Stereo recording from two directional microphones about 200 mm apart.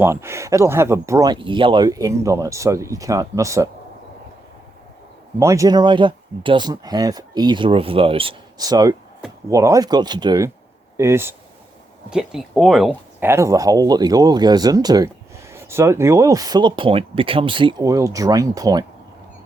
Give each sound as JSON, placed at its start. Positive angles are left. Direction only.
{"t": 0.0, "sound": "speech", "side_deg": -15}
{"t": 5.4, "sound": "speech", "side_deg": -15}